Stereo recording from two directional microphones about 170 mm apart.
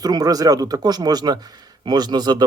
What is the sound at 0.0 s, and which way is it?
A man's voice, 20° right (ahead or behind).